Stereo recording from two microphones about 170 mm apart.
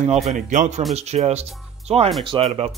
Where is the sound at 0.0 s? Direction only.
40° right (ahead or behind).